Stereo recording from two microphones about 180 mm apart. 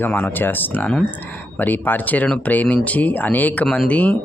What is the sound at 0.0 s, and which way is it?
Speech, 10° left (ahead or behind).